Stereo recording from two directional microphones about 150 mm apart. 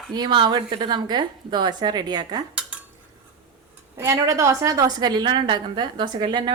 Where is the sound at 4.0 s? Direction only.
20° right (ahead or behind).